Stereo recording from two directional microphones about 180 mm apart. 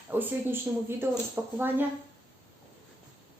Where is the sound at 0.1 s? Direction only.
10° right (ahead or behind).